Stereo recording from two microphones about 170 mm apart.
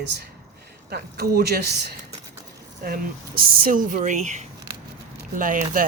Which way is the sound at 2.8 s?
60° right (ahead or behind).